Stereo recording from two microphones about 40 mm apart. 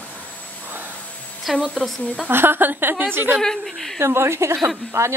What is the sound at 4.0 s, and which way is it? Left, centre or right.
Speech, right.